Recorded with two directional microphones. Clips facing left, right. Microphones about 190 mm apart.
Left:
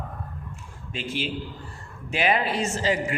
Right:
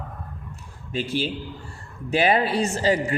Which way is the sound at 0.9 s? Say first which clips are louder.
Right 4 dB; 35° right (ahead or behind).